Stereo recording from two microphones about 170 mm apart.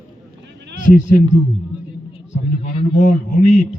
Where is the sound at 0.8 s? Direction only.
50° left (ahead or behind).